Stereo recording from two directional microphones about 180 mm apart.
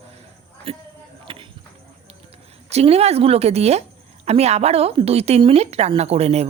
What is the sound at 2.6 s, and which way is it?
A woman's voice, 35° right (ahead or behind).